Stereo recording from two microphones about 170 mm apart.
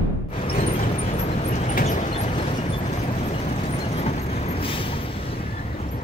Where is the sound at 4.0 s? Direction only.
40° left (ahead or behind).